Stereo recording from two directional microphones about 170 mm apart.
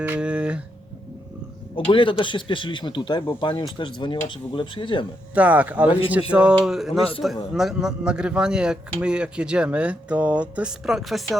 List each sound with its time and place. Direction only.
0.0 s guitar: 10° right (ahead or behind)
1.9 s speech: 30° left (ahead or behind)
5.3 s speech: 10° right (ahead or behind)